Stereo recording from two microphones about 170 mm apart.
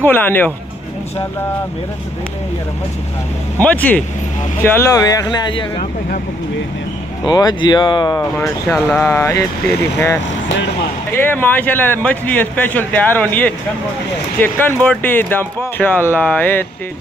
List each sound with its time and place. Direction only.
0.0 s a man's voice: 10° left (ahead or behind)
3.6 s a man's voice: 10° left (ahead or behind)
7.2 s a man's voice: 25° left (ahead or behind)